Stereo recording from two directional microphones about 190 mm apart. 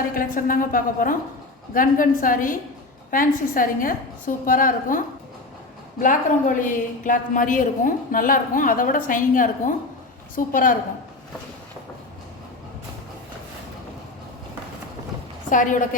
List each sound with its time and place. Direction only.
0.1 s a woman's voice: 45° left (ahead or behind)
15.4 s a woman's voice: 45° left (ahead or behind)